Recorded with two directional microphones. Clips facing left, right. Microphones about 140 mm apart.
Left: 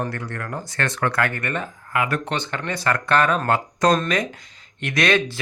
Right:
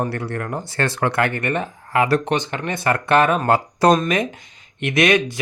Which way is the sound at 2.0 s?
35° right (ahead or behind).